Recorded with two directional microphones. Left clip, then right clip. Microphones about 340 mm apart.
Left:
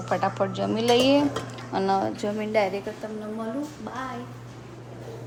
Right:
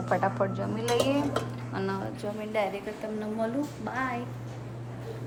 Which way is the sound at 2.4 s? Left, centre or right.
Left.